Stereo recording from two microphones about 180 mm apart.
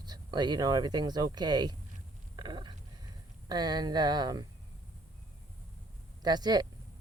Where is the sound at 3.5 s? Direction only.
20° right (ahead or behind).